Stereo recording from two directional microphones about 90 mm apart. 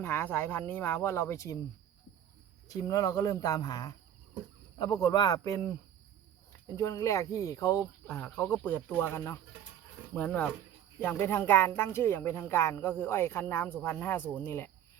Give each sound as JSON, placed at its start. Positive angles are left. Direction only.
{"t": 0.0, "sound": "speech", "side_deg": 25}
{"t": 2.6, "sound": "speech", "side_deg": 45}
{"t": 8.0, "sound": "speech", "side_deg": 20}